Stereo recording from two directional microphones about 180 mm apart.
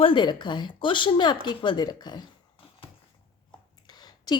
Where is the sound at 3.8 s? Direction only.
20° left (ahead or behind).